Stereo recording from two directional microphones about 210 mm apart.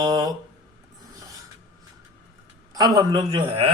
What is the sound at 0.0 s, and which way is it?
Speech, 20° right (ahead or behind).